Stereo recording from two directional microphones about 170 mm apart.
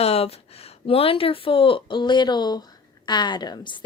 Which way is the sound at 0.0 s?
35° left (ahead or behind).